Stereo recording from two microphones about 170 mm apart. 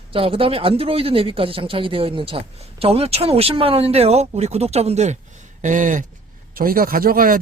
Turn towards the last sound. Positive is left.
turn(degrees=-55)  # may be behind; listen again after turning